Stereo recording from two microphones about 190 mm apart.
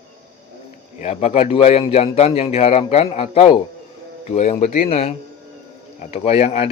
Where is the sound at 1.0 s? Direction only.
35° left (ahead or behind).